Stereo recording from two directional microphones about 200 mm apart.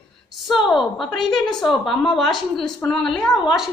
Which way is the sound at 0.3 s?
Centre (ahead or behind).